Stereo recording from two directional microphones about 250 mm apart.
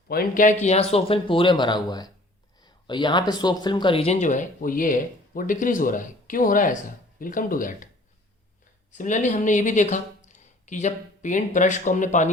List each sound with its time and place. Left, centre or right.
0.1 s speech: left
8.9 s speech: left